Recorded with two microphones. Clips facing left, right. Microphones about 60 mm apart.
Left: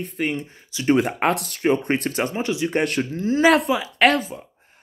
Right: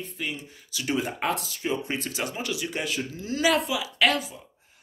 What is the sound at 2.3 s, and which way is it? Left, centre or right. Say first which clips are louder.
Speech: left 7 dB; left.